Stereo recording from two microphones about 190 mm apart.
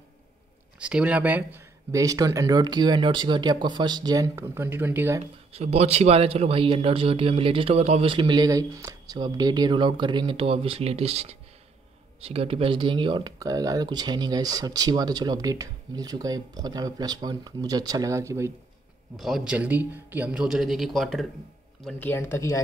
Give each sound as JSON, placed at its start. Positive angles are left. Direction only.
{"t": 0.7, "sound": "speech", "side_deg": -5}
{"t": 5.2, "sound": "speech", "side_deg": -35}
{"t": 19.1, "sound": "speech", "side_deg": 0}
{"t": 22.0, "sound": "speech", "side_deg": 10}